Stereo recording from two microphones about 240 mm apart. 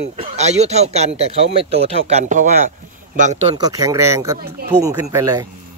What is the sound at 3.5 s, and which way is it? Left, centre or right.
Speech, centre.